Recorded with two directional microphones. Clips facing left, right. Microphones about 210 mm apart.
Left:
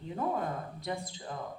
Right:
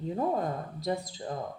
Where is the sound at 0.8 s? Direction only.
35° right (ahead or behind).